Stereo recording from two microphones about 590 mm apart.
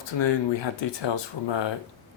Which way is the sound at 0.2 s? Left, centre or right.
Left.